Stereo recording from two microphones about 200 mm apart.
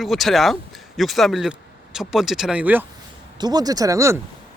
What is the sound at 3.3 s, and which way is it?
Speech, 20° right (ahead or behind).